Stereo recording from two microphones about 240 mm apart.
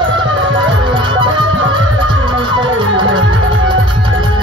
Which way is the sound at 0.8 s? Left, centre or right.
Centre.